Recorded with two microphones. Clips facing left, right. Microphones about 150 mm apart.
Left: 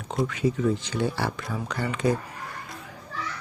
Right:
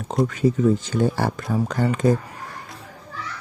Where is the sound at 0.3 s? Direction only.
45° right (ahead or behind).